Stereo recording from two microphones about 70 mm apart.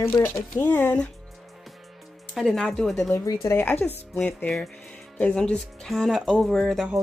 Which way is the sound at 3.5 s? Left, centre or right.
Left.